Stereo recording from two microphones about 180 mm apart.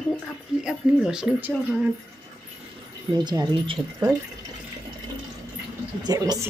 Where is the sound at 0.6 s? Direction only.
5° right (ahead or behind).